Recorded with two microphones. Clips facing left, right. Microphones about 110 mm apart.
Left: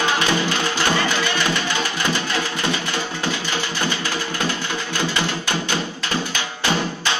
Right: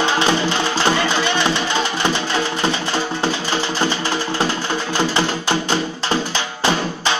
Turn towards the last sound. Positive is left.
turn(degrees=-30)  # may be behind; listen again after turning